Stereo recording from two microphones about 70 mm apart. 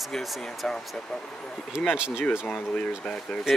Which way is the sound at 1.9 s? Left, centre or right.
Centre.